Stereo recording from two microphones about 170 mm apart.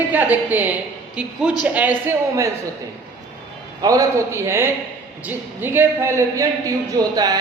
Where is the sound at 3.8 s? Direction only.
20° right (ahead or behind).